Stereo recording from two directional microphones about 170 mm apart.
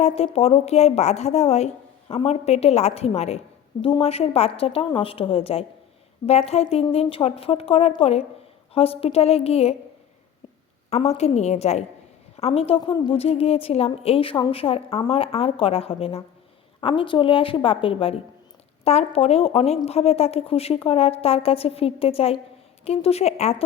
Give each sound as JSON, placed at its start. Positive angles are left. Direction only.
{"t": 0.0, "sound": "a woman's voice", "side_deg": 35}
{"t": 10.8, "sound": "a woman's voice", "side_deg": 40}